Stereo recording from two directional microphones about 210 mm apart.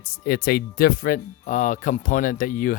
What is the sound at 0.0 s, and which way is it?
Speech, 45° left (ahead or behind).